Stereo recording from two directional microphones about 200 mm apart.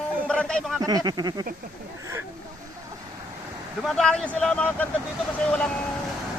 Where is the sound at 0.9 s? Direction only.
20° right (ahead or behind).